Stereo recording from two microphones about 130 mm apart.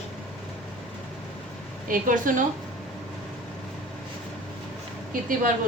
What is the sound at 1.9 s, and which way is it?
Speech, 90° right.